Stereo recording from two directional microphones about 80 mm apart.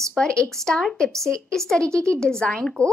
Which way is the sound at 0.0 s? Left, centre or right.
Centre.